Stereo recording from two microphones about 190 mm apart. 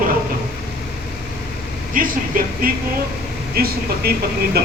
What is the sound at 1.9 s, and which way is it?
A man's voice, 50° right (ahead or behind).